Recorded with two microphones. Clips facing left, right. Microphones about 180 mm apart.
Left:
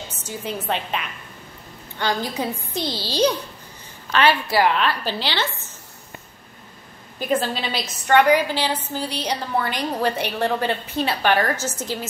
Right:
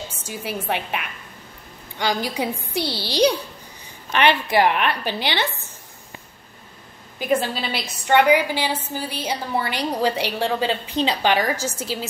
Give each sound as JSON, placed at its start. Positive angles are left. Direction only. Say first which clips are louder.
{"t": 0.1, "sound": "a woman's voice", "louder": "even", "side_deg": -10}
{"t": 7.7, "sound": "a woman's voice", "louder": "left 1 dB", "side_deg": -10}